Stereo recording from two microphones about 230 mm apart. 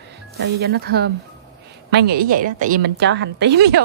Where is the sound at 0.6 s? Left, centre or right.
Right.